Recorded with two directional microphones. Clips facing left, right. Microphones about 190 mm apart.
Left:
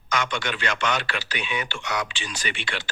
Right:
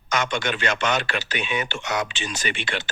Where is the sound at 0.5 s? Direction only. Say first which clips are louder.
Right 2 dB; 25° right (ahead or behind).